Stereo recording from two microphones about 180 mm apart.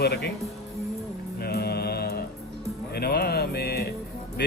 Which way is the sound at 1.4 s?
60° left (ahead or behind).